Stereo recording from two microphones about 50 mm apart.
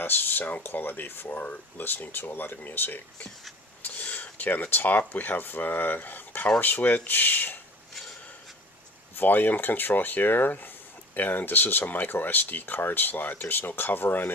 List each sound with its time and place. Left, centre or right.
0.0 s speech: left
9.1 s speech: left